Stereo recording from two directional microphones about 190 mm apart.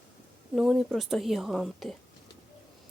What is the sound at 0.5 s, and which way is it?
A woman's voice, centre (ahead or behind).